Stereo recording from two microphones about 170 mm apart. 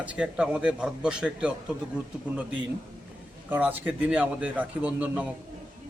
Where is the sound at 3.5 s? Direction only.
10° right (ahead or behind).